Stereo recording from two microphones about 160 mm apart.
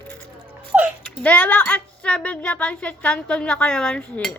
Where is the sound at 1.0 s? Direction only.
10° left (ahead or behind).